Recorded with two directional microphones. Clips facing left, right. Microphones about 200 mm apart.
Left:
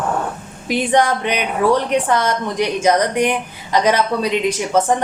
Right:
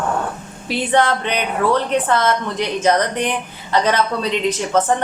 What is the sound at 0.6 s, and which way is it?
A woman's voice, 15° left (ahead or behind).